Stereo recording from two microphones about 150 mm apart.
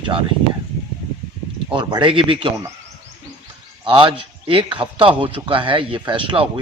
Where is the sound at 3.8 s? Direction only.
35° right (ahead or behind).